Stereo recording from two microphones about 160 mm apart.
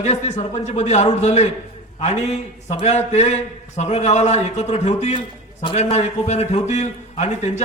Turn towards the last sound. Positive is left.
turn(degrees=45)  # may be behind; listen again after turning